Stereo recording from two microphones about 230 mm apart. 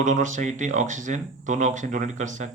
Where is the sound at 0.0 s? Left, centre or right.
Right.